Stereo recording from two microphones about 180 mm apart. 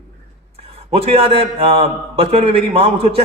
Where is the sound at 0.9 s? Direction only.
35° right (ahead or behind).